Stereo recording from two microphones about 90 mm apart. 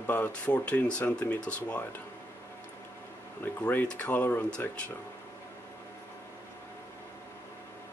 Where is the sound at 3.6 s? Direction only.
15° left (ahead or behind).